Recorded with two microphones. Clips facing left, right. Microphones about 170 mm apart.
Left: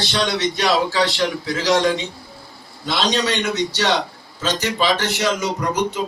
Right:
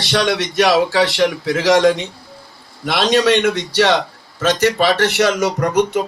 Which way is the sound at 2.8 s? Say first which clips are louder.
Right 6 dB; 80° right.